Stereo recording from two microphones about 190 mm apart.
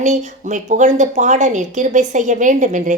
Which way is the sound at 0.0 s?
40° right (ahead or behind).